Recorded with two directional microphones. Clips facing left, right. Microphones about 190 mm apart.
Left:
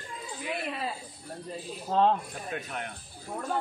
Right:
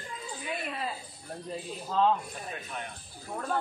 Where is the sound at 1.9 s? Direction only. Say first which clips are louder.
Left 2 dB; 55° left (ahead or behind).